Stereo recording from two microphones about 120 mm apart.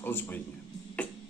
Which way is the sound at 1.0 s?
10° left (ahead or behind).